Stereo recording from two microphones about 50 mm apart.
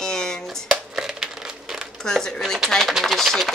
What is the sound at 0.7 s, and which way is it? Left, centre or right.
Crumpling, centre.